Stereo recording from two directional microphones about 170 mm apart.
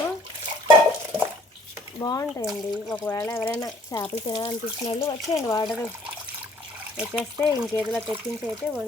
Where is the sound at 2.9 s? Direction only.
10° left (ahead or behind).